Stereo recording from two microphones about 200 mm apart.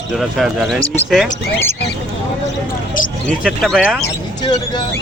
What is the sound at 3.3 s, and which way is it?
Speech, centre (ahead or behind).